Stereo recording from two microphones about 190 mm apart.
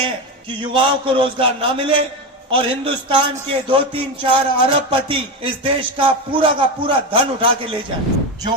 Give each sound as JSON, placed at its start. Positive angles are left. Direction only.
{"t": 0.0, "sound": "a man's voice", "side_deg": -25}